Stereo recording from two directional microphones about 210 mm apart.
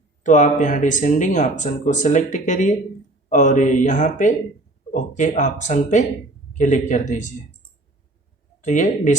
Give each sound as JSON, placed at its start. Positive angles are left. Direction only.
{"t": 0.2, "sound": "speech", "side_deg": 35}
{"t": 8.6, "sound": "speech", "side_deg": 35}